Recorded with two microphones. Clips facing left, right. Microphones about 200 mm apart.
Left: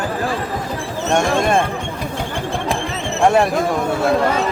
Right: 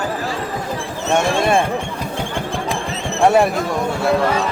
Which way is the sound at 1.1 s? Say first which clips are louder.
Even; 5° right (ahead or behind).